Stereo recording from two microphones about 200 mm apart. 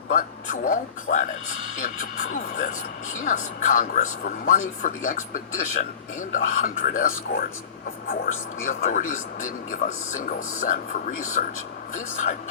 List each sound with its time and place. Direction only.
0.1 s speech: 45° left (ahead or behind)